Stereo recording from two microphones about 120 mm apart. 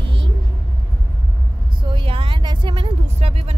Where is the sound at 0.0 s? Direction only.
45° right (ahead or behind).